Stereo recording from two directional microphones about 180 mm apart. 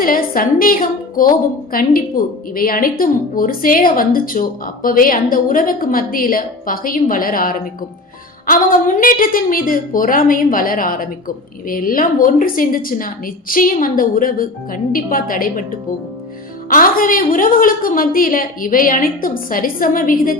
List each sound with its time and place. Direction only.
0.0 s a woman's voice: 50° left (ahead or behind)
16.6 s a woman's voice: 50° left (ahead or behind)